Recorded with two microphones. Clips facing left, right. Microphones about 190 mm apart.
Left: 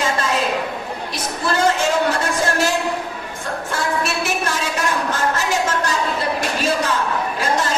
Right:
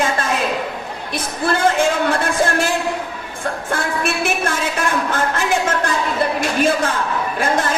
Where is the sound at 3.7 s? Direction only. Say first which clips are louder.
Even; 55° right (ahead or behind).